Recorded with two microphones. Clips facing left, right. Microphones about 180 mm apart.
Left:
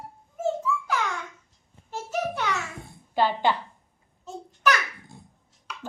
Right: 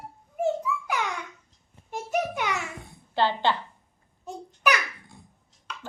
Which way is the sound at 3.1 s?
10° left (ahead or behind).